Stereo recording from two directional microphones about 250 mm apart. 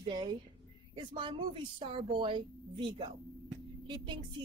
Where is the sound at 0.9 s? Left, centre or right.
Centre.